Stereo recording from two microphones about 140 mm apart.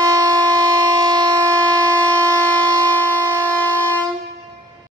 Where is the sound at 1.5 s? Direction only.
10° left (ahead or behind).